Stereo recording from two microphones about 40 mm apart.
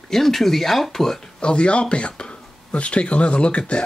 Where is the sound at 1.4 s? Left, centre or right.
Left.